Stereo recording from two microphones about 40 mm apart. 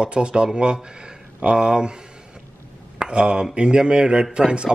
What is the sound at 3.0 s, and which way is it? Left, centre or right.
Speech, right.